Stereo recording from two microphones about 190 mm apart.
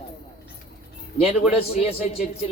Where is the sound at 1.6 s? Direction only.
30° left (ahead or behind).